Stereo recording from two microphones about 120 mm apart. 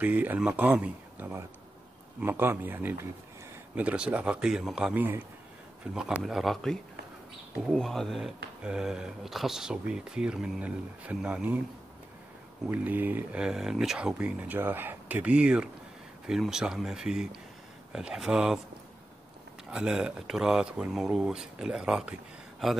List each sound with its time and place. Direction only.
0.0 s speech: 15° right (ahead or behind)
5.9 s speech: 5° right (ahead or behind)
12.6 s speech: 15° right (ahead or behind)
19.7 s speech: 5° right (ahead or behind)